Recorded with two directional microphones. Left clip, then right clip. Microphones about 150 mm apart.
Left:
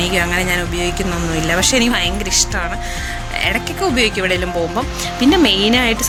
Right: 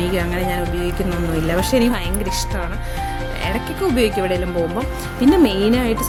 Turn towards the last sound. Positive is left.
turn(degrees=-5)  # may be behind; listen again after turning